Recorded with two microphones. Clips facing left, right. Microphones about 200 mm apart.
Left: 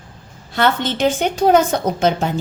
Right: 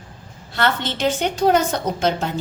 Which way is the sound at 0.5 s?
50° left (ahead or behind).